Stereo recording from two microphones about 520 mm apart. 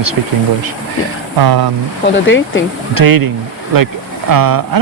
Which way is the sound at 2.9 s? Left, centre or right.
Right.